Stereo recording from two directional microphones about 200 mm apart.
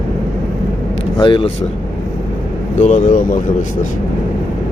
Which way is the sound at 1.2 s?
25° left (ahead or behind).